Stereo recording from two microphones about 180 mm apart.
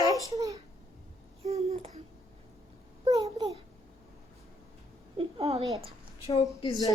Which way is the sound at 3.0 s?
20° right (ahead or behind).